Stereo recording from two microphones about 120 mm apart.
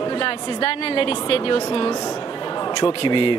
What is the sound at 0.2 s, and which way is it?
A woman's voice, 50° left (ahead or behind).